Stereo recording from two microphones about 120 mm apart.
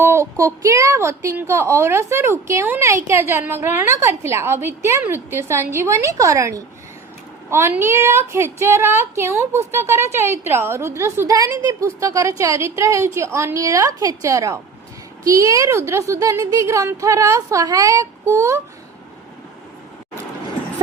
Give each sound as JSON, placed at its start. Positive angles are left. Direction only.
{"t": 0.0, "sound": "a woman's voice", "side_deg": -20}